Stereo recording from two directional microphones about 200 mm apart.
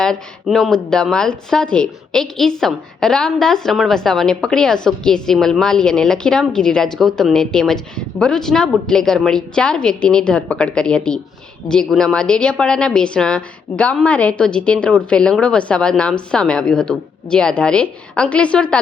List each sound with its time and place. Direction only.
0.0 s speech: centre (ahead or behind)